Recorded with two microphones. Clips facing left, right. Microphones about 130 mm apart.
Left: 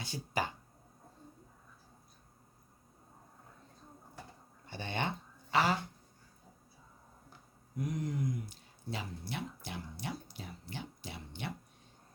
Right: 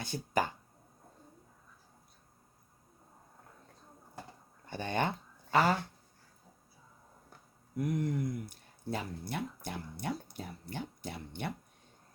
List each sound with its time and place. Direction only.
0.0 s speech: 50° right (ahead or behind)
4.6 s a sound: 45° right (ahead or behind)
7.8 s speech: 60° right (ahead or behind)